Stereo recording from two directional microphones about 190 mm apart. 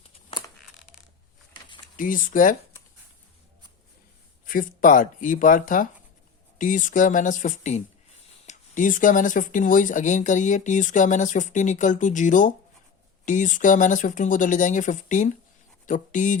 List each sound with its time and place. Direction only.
0.3 s a sound: 20° left (ahead or behind)
2.0 s speech: 45° left (ahead or behind)
4.4 s speech: 45° left (ahead or behind)